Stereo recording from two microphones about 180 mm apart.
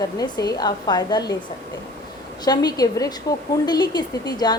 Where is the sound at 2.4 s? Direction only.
20° left (ahead or behind).